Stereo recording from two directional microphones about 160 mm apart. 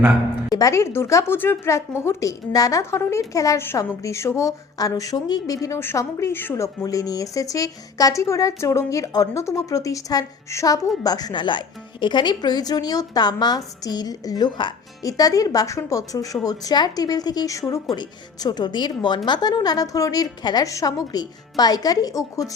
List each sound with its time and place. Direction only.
0.5 s speech: 20° left (ahead or behind)